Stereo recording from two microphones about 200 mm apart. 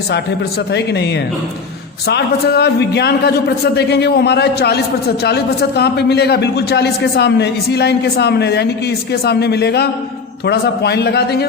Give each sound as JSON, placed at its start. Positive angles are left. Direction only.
{"t": 0.7, "sound": "a man's voice", "side_deg": 55}
{"t": 2.0, "sound": "a man's voice", "side_deg": 55}